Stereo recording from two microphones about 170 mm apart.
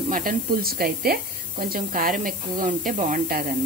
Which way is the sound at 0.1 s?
55° right (ahead or behind).